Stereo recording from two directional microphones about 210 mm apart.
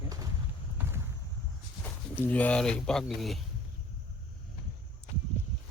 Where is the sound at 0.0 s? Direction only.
15° right (ahead or behind).